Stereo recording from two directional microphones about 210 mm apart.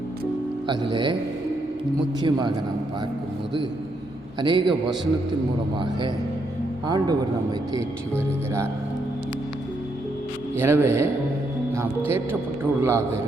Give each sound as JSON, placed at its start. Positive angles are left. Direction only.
{"t": 0.7, "sound": "speech", "side_deg": -20}
{"t": 2.2, "sound": "speech", "side_deg": -20}
{"t": 4.4, "sound": "speech", "side_deg": -20}
{"t": 6.8, "sound": "speech", "side_deg": -20}
{"t": 10.6, "sound": "speech", "side_deg": -10}
{"t": 12.1, "sound": "speech", "side_deg": -10}